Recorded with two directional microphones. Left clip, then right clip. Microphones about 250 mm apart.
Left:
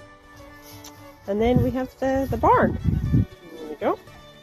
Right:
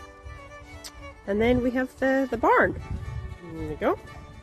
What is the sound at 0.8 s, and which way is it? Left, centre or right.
Speech, centre.